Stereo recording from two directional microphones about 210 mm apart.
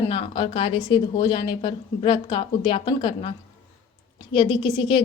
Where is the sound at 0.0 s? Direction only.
25° left (ahead or behind).